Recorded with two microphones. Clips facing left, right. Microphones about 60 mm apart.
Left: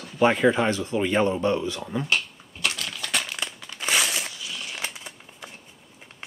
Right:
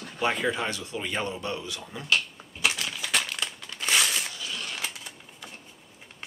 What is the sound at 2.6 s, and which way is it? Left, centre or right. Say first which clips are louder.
Crumpling: right 1 dB; centre.